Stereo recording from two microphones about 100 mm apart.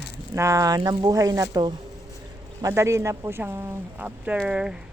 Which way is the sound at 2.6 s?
30° right (ahead or behind).